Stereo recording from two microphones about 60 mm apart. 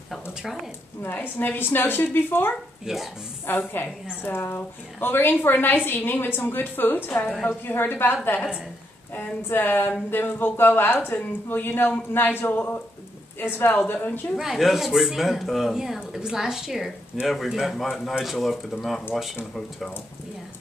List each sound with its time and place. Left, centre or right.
0.4 s a woman's voice: centre
1.4 s a woman's voice: left
2.8 s speech: centre
3.4 s a woman's voice: left
14.3 s speech: centre